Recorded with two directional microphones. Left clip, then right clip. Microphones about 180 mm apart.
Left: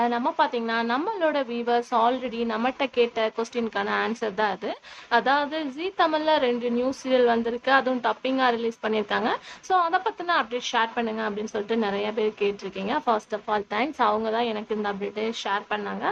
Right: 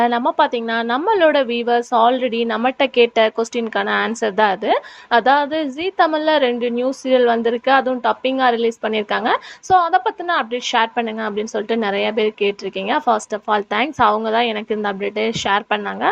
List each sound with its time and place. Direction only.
0.0 s speech: 35° right (ahead or behind)